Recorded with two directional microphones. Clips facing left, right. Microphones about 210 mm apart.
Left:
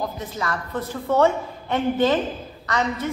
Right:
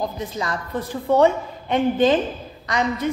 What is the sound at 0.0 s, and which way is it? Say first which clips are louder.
A woman's voice: right 2 dB; 15° right (ahead or behind).